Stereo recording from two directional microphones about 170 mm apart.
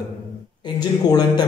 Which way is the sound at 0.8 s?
25° left (ahead or behind).